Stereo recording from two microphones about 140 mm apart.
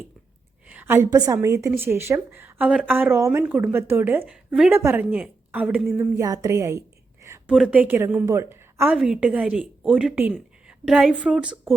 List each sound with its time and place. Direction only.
0.7 s a woman's voice: 15° right (ahead or behind)
4.3 s a woman's voice: 5° right (ahead or behind)
4.7 s a woman's voice: 15° right (ahead or behind)
6.0 s a woman's voice: 20° right (ahead or behind)
7.4 s a woman's voice: 5° right (ahead or behind)
9.0 s a woman's voice: 5° right (ahead or behind)